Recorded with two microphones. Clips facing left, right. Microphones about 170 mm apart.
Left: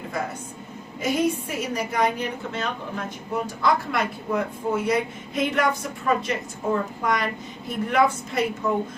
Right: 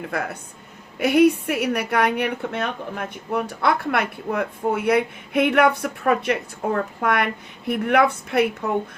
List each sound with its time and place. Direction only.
0.1 s speech: 65° right (ahead or behind)